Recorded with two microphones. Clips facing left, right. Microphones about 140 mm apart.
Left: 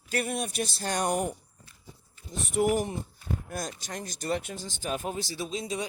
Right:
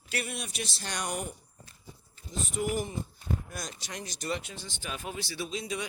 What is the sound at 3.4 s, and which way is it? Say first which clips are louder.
A man's voice: left 5 dB; 50° left (ahead or behind).